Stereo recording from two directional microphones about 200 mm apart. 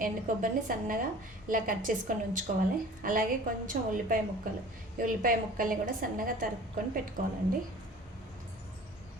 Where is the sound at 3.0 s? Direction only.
45° right (ahead or behind).